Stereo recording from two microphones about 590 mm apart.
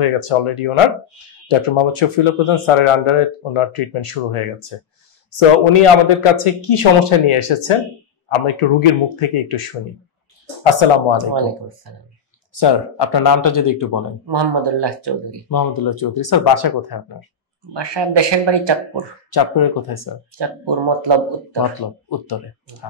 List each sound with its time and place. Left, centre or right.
0.0 s a man's voice: left
12.5 s speech: left
14.2 s speech: right
15.5 s speech: left
17.7 s speech: right
19.3 s speech: left
20.3 s speech: right
21.7 s speech: left